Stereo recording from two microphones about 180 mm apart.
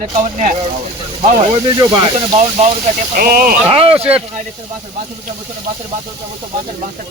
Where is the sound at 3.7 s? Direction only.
35° right (ahead or behind).